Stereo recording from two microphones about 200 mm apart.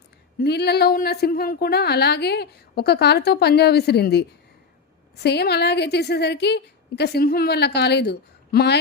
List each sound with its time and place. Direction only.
0.3 s a woman's voice: 55° left (ahead or behind)